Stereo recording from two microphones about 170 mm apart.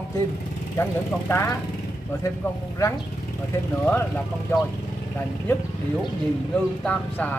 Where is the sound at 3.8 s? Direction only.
10° left (ahead or behind).